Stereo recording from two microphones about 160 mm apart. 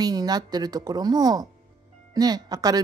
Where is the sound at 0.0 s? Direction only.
25° right (ahead or behind).